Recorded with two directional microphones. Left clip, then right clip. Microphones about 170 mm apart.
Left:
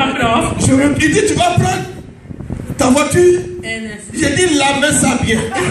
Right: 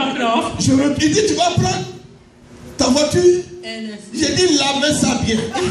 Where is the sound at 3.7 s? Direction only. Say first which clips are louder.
Left 6 dB; 20° left (ahead or behind).